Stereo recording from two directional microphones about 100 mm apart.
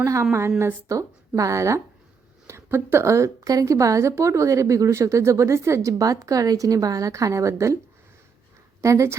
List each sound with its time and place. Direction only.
0.0 s a woman's voice: 25° right (ahead or behind)
8.8 s a woman's voice: 30° right (ahead or behind)